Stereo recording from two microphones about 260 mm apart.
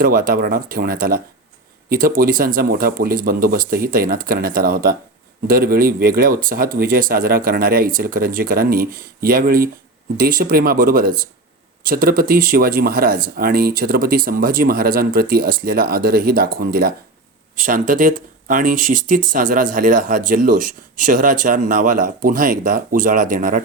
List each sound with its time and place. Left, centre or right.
0.0 s speech: right